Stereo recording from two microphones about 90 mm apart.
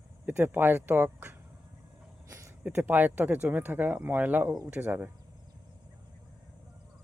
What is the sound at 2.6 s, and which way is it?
Speech, 20° right (ahead or behind).